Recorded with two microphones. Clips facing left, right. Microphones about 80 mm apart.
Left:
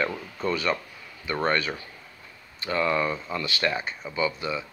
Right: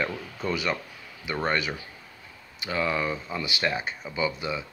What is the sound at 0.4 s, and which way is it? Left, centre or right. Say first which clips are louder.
Speech: left 2 dB; centre.